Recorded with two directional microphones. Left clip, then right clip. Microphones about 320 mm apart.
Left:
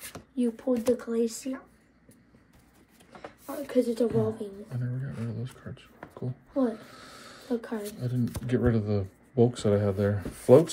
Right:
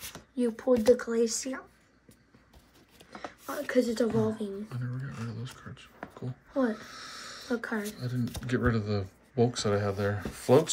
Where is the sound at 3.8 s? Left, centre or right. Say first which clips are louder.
Left 1 dB; right.